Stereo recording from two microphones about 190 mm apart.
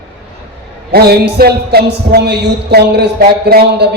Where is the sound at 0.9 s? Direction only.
55° right (ahead or behind).